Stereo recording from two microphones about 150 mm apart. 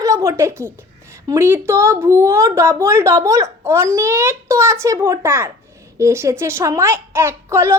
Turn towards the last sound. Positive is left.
turn(degrees=-15)  # may be behind; listen again after turning